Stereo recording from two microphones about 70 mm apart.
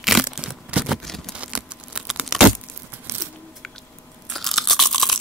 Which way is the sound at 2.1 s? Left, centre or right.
Centre.